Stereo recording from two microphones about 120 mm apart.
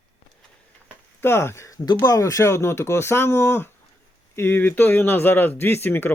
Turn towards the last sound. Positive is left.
turn(degrees=15)  # may be behind; listen again after turning